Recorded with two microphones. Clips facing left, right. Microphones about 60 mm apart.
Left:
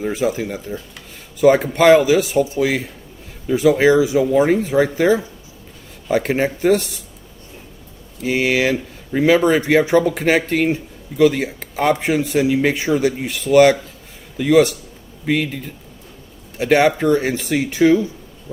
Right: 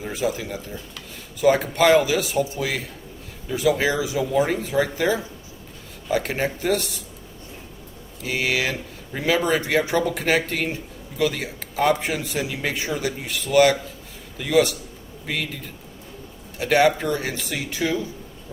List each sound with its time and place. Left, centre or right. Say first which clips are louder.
0.0 s speech: left 6 dB; left
8.3 s speech: left 7 dB; left
16.6 s speech: left 4 dB; left